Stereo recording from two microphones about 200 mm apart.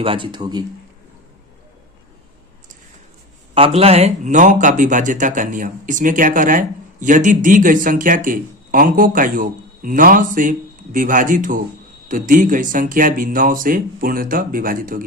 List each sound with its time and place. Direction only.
0.0 s speech: 25° right (ahead or behind)
3.8 s speech: 30° right (ahead or behind)